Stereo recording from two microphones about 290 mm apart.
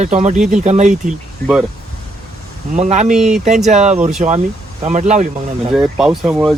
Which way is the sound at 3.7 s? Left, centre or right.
Right.